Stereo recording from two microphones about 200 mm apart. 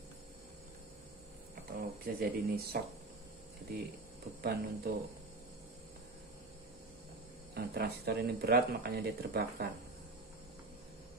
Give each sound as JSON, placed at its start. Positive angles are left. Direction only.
{"t": 1.5, "sound": "speech", "side_deg": -50}
{"t": 4.4, "sound": "speech", "side_deg": -50}
{"t": 7.5, "sound": "speech", "side_deg": -50}